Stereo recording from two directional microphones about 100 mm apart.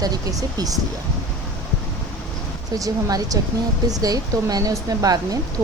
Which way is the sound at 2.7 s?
35° right (ahead or behind).